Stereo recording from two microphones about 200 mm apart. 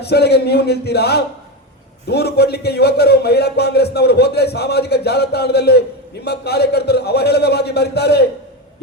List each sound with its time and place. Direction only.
0.0 s a man's voice: 55° left (ahead or behind)